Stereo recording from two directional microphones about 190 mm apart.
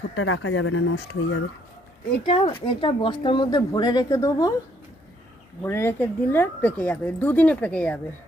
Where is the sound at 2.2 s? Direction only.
30° left (ahead or behind).